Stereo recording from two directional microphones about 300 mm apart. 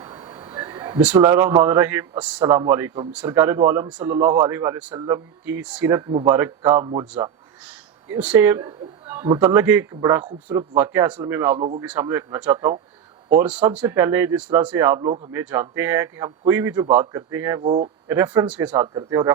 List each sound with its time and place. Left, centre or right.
0.0 s a sound: centre
2.4 s speech: centre
8.1 s speech: centre
17.6 s speech: right
18.1 s speech: centre